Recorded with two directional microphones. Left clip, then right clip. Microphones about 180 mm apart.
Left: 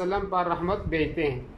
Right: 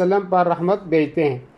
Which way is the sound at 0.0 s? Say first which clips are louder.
Right 9 dB; 25° right (ahead or behind).